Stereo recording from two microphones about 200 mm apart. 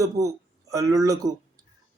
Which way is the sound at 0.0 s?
15° right (ahead or behind).